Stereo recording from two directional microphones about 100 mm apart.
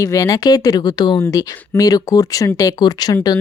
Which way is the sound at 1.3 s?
35° left (ahead or behind).